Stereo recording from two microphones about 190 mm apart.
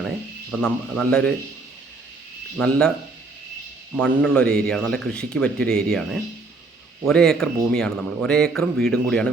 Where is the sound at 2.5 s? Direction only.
5° left (ahead or behind).